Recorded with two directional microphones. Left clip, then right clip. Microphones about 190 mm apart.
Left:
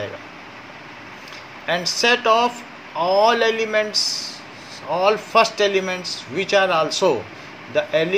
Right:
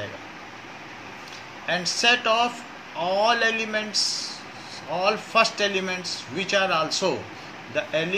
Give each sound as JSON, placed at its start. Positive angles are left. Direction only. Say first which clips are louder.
{"t": 1.7, "sound": "speech", "louder": "left 3 dB", "side_deg": 35}